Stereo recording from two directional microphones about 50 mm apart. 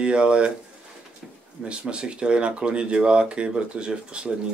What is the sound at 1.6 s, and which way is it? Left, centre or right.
Speech, right.